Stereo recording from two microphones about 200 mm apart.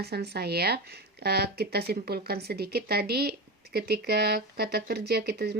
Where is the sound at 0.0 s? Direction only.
55° right (ahead or behind).